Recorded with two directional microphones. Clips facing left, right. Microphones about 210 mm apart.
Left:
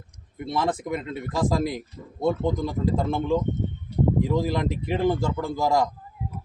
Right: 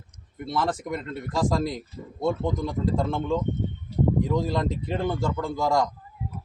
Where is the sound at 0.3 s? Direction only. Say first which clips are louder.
Left 1 dB; 10° left (ahead or behind).